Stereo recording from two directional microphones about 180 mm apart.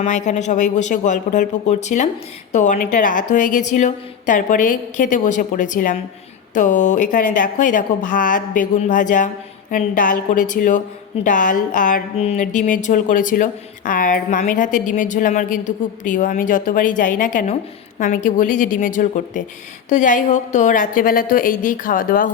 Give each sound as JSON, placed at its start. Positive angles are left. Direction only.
{"t": 0.0, "sound": "a woman's voice", "side_deg": 40}